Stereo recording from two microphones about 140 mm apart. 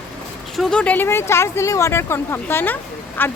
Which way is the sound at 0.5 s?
5° left (ahead or behind).